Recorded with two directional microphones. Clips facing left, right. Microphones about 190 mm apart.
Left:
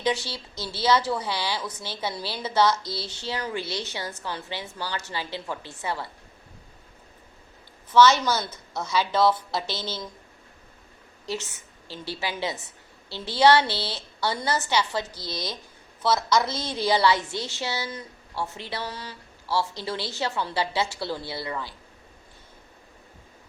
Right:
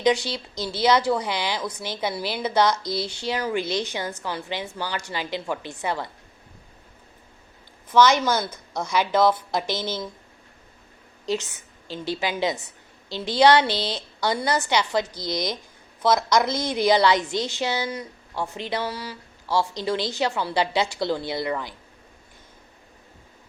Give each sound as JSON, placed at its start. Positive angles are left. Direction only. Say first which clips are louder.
{"t": 0.0, "sound": "speech", "louder": "right 5 dB", "side_deg": -15}
{"t": 7.9, "sound": "speech", "louder": "right 1 dB", "side_deg": -15}
{"t": 11.3, "sound": "a woman's voice", "louder": "right 5 dB", "side_deg": -15}